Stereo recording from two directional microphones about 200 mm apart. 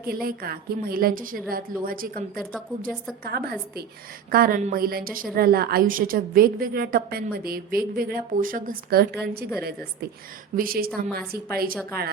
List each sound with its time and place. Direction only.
0.0 s a woman's voice: 45° right (ahead or behind)